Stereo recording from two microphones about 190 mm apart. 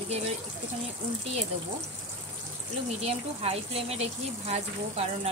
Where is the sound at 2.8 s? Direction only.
30° right (ahead or behind).